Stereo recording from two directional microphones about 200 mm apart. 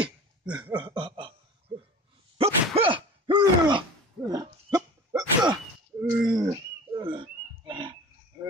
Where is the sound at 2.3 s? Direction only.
30° right (ahead or behind).